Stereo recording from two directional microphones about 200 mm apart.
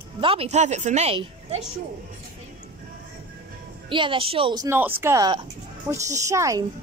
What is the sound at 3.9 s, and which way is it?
A child's voice, 25° right (ahead or behind).